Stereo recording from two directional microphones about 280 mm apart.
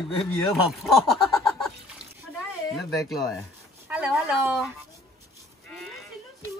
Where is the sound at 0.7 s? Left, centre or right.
Centre.